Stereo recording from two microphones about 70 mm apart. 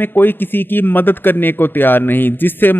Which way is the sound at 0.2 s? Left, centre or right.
Left.